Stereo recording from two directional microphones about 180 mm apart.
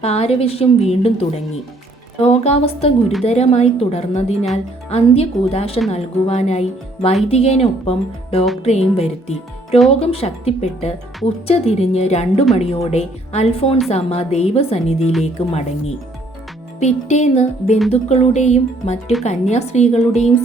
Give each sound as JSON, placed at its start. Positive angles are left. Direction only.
{"t": 0.0, "sound": "a woman's voice", "side_deg": 35}
{"t": 16.8, "sound": "a woman's voice", "side_deg": 40}